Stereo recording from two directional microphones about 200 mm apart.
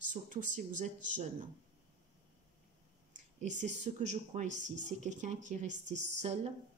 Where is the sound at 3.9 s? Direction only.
40° right (ahead or behind).